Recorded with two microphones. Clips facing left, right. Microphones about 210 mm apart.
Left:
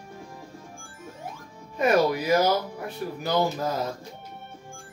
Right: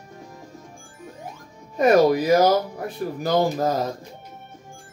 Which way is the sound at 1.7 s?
40° right (ahead or behind).